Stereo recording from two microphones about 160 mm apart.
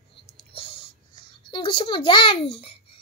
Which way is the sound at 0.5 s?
35° left (ahead or behind).